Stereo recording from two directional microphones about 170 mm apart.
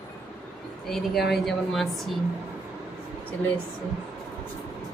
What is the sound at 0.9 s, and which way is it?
A woman's voice, centre (ahead or behind).